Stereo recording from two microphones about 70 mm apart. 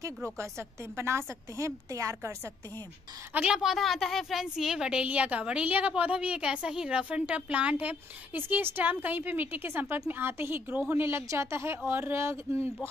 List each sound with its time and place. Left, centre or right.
0.4 s a woman's voice: right
3.3 s a woman's voice: centre; by 10.6 s right
10.7 s a woman's voice: right
11.1 s a woman's voice: right